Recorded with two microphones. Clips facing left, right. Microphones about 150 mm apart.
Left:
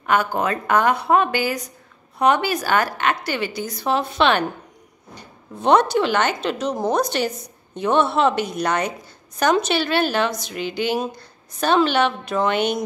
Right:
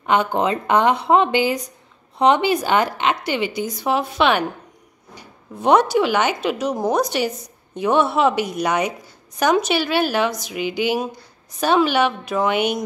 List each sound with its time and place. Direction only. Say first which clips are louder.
0.0 s a woman's voice: right 2 dB; 20° right (ahead or behind)